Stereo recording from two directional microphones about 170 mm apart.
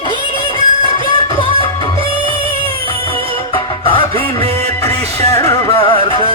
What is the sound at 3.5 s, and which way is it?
Music, 30° left (ahead or behind).